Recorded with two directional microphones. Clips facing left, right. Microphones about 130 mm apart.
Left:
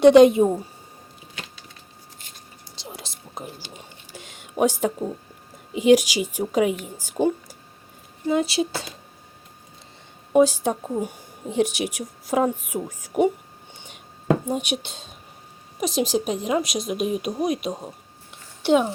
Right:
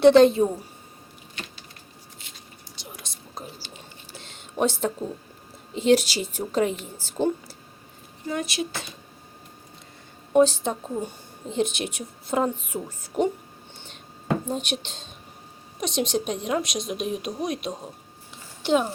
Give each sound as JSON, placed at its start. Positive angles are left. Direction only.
{"t": 0.0, "sound": "a woman's voice", "side_deg": 10}
{"t": 2.8, "sound": "whispering", "side_deg": 25}
{"t": 4.1, "sound": "a sound", "side_deg": 10}
{"t": 5.7, "sound": "a woman's voice", "side_deg": 10}
{"t": 8.3, "sound": "speech", "side_deg": 25}
{"t": 10.3, "sound": "a woman's voice", "side_deg": 10}
{"t": 13.7, "sound": "a sound", "side_deg": 10}
{"t": 14.4, "sound": "a woman's voice", "side_deg": 10}